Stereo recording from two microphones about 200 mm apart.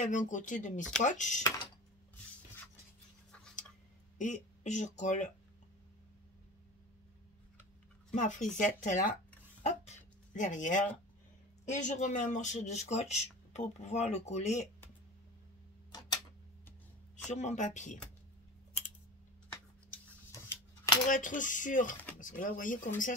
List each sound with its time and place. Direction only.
0.0 s speech: 40° left (ahead or behind)
3.3 s tick-tock: 5° left (ahead or behind)
4.2 s speech: 35° left (ahead or behind)
8.1 s speech: 40° left (ahead or behind)
9.6 s a sound: 35° left (ahead or behind)
11.7 s speech: 35° left (ahead or behind)
17.3 s speech: 35° left (ahead or behind)
20.3 s a sound: 15° left (ahead or behind)
21.1 s speech: 40° left (ahead or behind)